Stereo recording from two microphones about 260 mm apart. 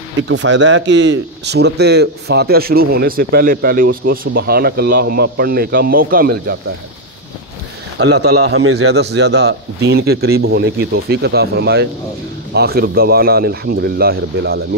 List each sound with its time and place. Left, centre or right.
0.3 s a man's voice: right
8.0 s a man's voice: right